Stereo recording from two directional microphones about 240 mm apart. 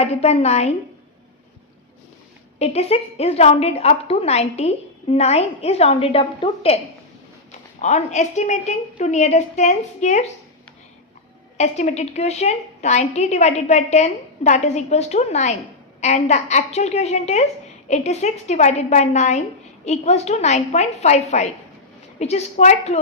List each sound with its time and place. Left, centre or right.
0.0 s a woman's voice: left
2.6 s a woman's voice: left
7.8 s a woman's voice: left
11.5 s a woman's voice: left